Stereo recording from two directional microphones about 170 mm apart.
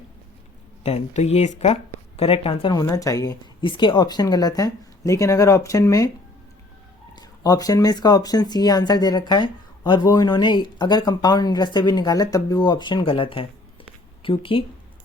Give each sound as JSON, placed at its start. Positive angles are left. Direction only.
{"t": 0.9, "sound": "speech", "side_deg": 40}
{"t": 2.8, "sound": "speech", "side_deg": 20}
{"t": 7.2, "sound": "a woman's voice", "side_deg": 20}